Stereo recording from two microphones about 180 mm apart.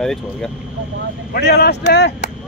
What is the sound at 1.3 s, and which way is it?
Speech, 65° left (ahead or behind).